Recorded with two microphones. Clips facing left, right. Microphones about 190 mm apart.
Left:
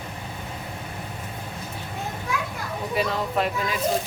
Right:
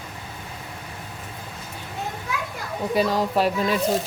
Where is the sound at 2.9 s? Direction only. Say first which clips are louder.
Right 4 dB; 35° right (ahead or behind).